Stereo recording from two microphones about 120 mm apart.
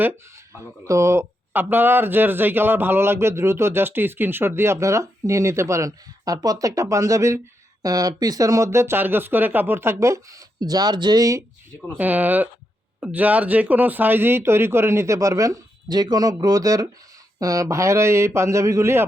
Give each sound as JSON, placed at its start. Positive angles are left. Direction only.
{"t": 0.0, "sound": "speech", "side_deg": -20}
{"t": 11.9, "sound": "speech", "side_deg": -15}